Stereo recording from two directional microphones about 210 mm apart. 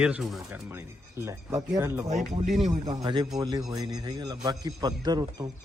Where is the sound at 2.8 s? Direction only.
20° right (ahead or behind).